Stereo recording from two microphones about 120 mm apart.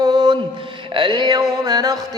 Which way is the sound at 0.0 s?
35° right (ahead or behind).